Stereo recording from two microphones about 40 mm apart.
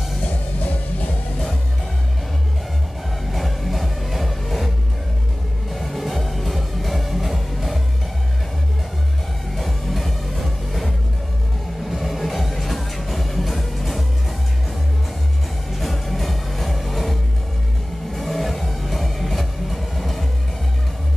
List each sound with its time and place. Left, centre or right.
0.3 s music: left
3.3 s music: centre
9.6 s music: centre
15.7 s music: centre
18.1 s vehicle: centre